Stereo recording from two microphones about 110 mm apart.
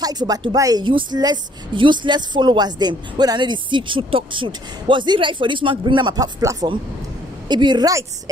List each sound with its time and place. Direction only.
0.0 s a woman's voice: 35° right (ahead or behind)
0.8 s a woman's voice: 45° right (ahead or behind)